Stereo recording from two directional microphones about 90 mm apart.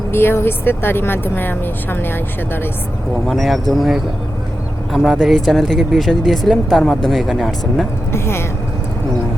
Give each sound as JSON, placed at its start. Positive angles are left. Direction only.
{"t": 0.1, "sound": "speech", "side_deg": 25}
{"t": 3.2, "sound": "speech", "side_deg": 0}
{"t": 8.1, "sound": "speech", "side_deg": 30}